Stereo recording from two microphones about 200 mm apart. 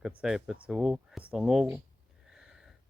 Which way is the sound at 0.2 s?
5° right (ahead or behind).